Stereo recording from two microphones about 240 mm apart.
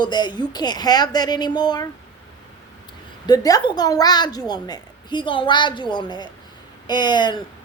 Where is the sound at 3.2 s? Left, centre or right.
Centre.